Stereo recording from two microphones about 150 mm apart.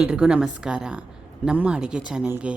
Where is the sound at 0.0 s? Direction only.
5° right (ahead or behind).